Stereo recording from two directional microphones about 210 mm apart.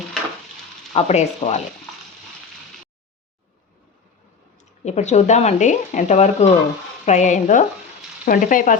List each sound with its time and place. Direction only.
0.9 s speech: 30° left (ahead or behind)
4.8 s speech: 35° left (ahead or behind)